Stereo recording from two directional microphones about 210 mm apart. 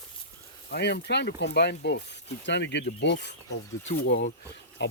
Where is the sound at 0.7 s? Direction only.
50° left (ahead or behind).